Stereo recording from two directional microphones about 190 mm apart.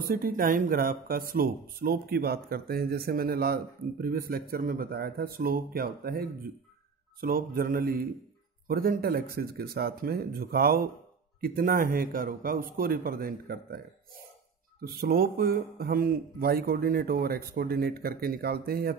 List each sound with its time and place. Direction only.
0.0 s speech: 50° right (ahead or behind)